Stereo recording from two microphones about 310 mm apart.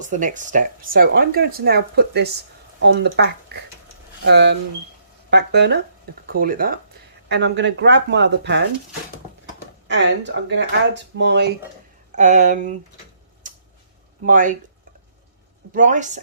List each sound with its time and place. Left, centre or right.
0.0 s speech: right
9.8 s a sound: right
10.5 s speech: right
13.5 s tick-tock: right
14.3 s speech: right
15.7 s speech: right